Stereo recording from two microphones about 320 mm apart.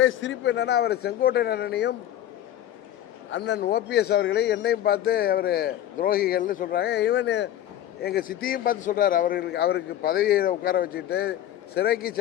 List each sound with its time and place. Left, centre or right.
0.0 s speech: left
3.2 s a man's voice: left